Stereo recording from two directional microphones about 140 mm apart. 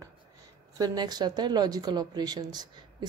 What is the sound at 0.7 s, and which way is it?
Speech, 25° right (ahead or behind).